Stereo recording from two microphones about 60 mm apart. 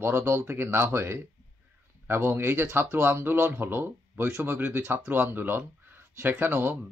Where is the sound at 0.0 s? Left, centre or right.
Right.